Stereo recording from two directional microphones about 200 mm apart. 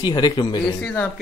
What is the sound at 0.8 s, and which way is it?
Speech, 5° left (ahead or behind).